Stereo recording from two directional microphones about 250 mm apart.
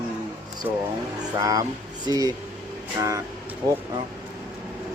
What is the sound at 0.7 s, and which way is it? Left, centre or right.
Speech, centre.